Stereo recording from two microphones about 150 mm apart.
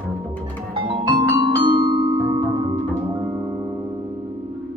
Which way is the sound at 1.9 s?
30° right (ahead or behind).